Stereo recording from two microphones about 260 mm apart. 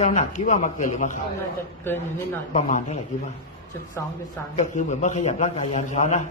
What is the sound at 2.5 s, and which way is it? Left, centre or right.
Speech, left.